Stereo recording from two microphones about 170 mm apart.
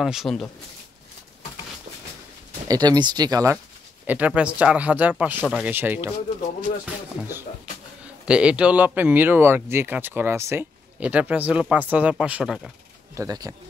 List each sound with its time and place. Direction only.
0.0 s speech: centre (ahead or behind)
2.7 s speech: 25° right (ahead or behind)
4.0 s speech: 10° right (ahead or behind)
8.3 s speech: 5° right (ahead or behind)
13.1 s speech: 20° right (ahead or behind)